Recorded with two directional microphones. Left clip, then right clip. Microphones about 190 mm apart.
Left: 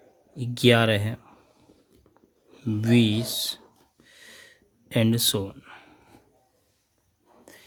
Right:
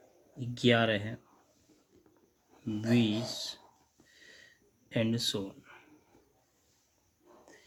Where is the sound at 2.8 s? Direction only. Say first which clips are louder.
Left 7 dB; 50° left (ahead or behind).